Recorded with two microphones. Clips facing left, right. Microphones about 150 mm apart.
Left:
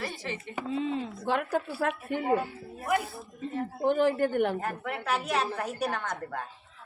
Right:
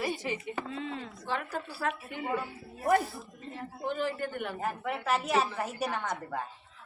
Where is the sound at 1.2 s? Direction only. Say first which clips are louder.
Left 6 dB; 55° left (ahead or behind).